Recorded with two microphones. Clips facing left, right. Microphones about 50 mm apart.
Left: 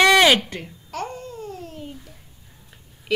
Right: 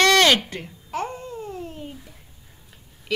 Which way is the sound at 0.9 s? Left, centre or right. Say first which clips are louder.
Right 2 dB; centre.